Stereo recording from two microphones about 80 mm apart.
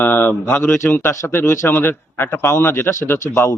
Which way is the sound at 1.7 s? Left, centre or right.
Left.